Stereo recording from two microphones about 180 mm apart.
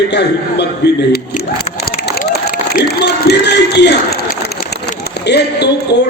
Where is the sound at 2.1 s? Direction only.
60° left (ahead or behind).